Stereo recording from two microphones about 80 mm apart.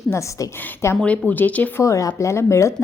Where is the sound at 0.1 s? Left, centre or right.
Left.